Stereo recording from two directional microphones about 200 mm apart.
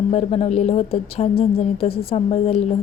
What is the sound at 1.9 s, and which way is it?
Speech, 50° left (ahead or behind).